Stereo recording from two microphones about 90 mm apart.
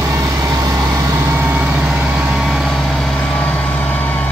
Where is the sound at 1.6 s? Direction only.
10° right (ahead or behind).